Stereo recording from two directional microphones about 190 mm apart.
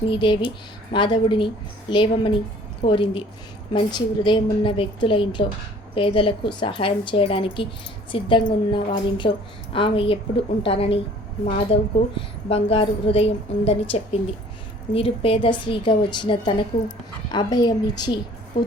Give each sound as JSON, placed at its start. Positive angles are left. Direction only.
{"t": 0.0, "sound": "a woman's voice", "side_deg": 25}